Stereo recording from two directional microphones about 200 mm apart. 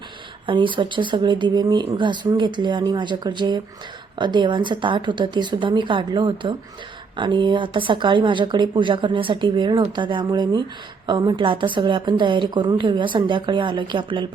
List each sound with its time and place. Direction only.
0.4 s speech: 25° right (ahead or behind)